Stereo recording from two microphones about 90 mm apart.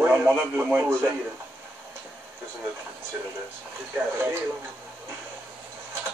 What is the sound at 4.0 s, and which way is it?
Speech, 25° right (ahead or behind).